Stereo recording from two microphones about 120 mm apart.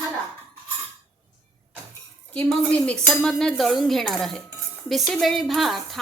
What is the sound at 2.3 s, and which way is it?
A woman's voice, 10° left (ahead or behind).